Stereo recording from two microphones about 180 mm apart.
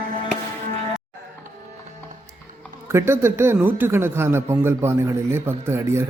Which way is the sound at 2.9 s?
15° right (ahead or behind).